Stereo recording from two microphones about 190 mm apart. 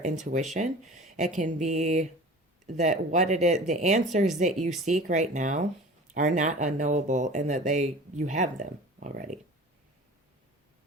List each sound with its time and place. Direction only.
0.0 s speech: 40° right (ahead or behind)